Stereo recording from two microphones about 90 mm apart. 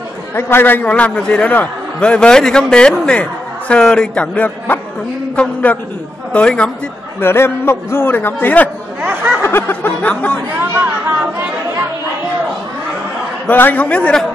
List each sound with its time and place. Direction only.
0.4 s a man's voice: 25° left (ahead or behind)
7.2 s a man's voice: 25° left (ahead or behind)
9.0 s a sound: 25° right (ahead or behind)
9.4 s a man's voice: 25° left (ahead or behind)
10.6 s speech: 25° right (ahead or behind)
13.5 s a man's voice: 20° left (ahead or behind)